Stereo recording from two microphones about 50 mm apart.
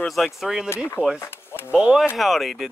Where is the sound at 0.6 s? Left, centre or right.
Left.